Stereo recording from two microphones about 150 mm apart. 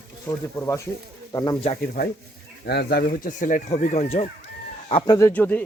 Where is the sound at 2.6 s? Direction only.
90° left; by 4.2 s 45° left (ahead or behind).